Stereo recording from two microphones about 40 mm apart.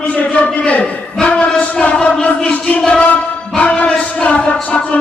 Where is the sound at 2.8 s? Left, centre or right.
Left.